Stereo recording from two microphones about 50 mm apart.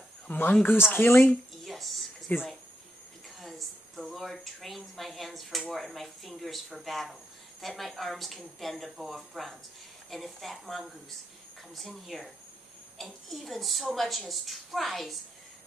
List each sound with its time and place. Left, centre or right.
0.3 s speech: left
0.8 s speech: left
1.6 s a sound: centre
2.3 s speech: left
3.3 s a woman's voice: centre